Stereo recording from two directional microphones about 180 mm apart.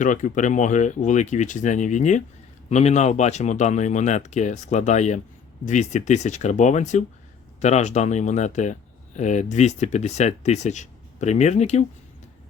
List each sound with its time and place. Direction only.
0.0 s speech: 45° left (ahead or behind)